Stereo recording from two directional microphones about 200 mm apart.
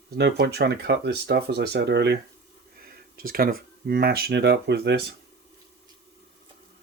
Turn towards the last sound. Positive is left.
turn(degrees=-55)  # may be behind; listen again after turning